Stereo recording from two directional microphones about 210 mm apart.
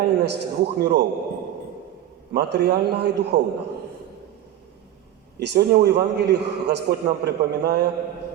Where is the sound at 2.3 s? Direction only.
50° right (ahead or behind).